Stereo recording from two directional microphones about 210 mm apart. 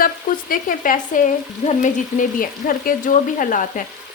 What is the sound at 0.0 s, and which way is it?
Speech, 40° left (ahead or behind).